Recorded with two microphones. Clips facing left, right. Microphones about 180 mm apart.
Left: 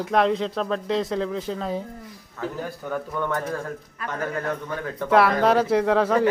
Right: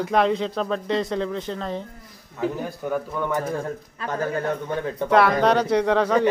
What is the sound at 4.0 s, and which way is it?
A man's voice, 30° right (ahead or behind).